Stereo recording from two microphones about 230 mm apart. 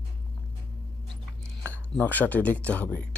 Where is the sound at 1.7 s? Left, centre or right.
Centre.